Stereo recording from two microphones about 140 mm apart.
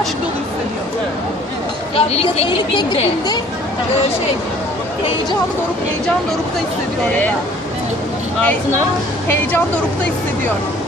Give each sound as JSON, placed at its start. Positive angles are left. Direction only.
{"t": 2.0, "sound": "a woman's voice", "side_deg": 45}